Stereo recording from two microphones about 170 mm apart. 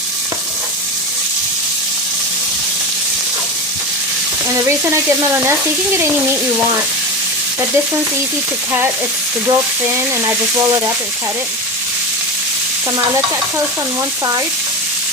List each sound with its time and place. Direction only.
4.9 s frying: 15° right (ahead or behind)
9.5 s frying: 15° right (ahead or behind)